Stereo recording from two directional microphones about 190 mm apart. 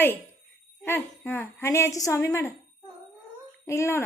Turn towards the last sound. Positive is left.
turn(degrees=15)  # may be behind; listen again after turning